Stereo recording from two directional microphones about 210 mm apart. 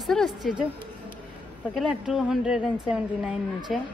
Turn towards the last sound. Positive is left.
turn(degrees=0)  # may be behind; listen again after turning